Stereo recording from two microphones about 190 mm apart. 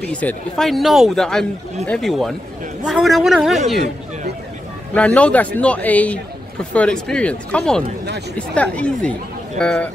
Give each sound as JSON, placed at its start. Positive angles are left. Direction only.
{"t": 0.1, "sound": "speech", "side_deg": 5}
{"t": 4.9, "sound": "speech", "side_deg": 5}